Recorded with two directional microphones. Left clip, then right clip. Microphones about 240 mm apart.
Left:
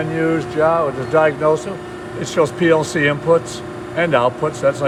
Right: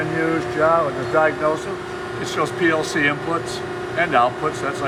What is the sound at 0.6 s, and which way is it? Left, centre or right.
Speech, left.